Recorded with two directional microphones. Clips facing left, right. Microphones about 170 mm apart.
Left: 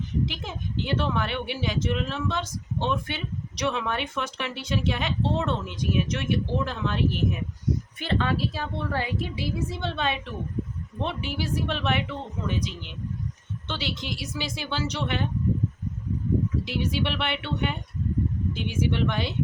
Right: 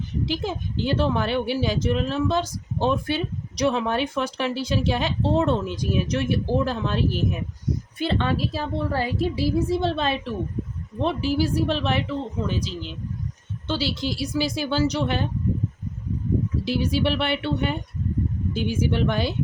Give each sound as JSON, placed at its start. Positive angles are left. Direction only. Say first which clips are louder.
{"t": 0.3, "sound": "a woman's voice", "louder": "right 7 dB", "side_deg": -35}
{"t": 16.6, "sound": "a woman's voice", "louder": "right 5 dB", "side_deg": -35}